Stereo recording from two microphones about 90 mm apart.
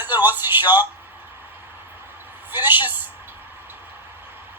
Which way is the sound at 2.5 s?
20° right (ahead or behind).